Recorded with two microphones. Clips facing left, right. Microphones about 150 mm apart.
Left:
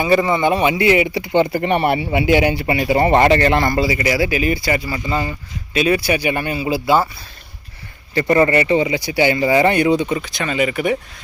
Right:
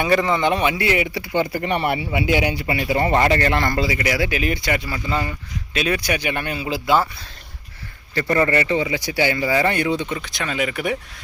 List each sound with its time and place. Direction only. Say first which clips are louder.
0.0 s speech: left 3 dB; 5° left (ahead or behind)
1.3 s speech: left 5 dB; 25° left (ahead or behind)
3.6 s speech: left 4 dB; 10° left (ahead or behind)
8.1 s speech: left 5 dB; 20° left (ahead or behind); by 10.9 s centre (ahead or behind)